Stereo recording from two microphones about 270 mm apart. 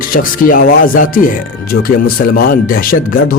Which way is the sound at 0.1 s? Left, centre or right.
Left.